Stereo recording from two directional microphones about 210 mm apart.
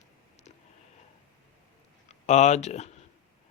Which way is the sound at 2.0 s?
35° left (ahead or behind).